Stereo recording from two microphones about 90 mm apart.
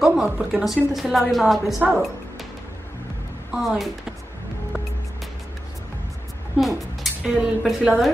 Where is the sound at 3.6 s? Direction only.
Centre (ahead or behind).